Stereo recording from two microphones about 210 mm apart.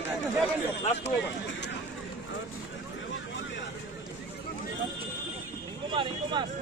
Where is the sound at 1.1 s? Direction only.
55° left (ahead or behind).